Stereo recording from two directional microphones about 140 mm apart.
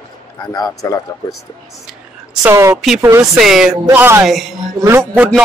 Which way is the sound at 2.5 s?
20° right (ahead or behind).